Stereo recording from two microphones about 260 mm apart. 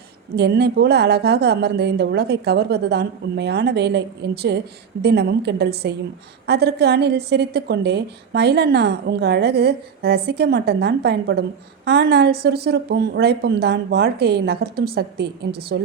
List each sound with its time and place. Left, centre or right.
0.3 s a woman's voice: right